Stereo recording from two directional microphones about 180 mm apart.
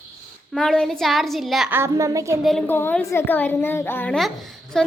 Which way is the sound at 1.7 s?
15° right (ahead or behind).